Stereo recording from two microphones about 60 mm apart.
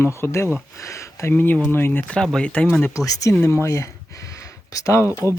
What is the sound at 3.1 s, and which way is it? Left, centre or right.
Speech, left.